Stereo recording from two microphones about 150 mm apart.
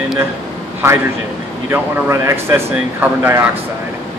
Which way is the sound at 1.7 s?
15° right (ahead or behind).